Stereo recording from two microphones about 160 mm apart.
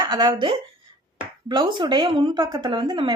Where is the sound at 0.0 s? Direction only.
30° right (ahead or behind).